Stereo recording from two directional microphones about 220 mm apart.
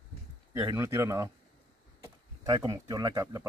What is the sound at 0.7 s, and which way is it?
Speech, 10° right (ahead or behind).